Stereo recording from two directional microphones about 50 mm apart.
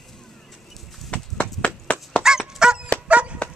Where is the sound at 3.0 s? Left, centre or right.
Right.